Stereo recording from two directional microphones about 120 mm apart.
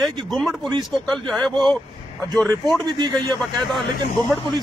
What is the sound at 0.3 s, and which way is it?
A man's voice, centre (ahead or behind).